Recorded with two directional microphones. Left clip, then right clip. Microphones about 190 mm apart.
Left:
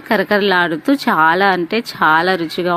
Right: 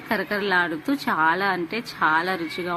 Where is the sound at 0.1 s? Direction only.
40° left (ahead or behind).